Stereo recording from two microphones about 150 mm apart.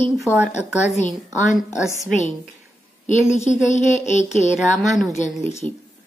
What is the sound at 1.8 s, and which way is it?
Speech, 20° left (ahead or behind).